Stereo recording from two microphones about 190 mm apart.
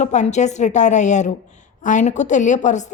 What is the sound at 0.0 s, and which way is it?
A woman's voice, 40° left (ahead or behind).